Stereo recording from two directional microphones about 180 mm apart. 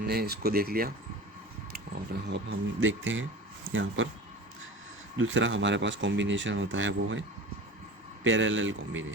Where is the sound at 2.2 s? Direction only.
80° right.